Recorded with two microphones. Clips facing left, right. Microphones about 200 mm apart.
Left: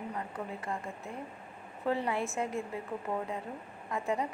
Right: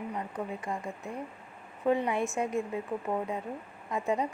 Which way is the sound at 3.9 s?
20° right (ahead or behind).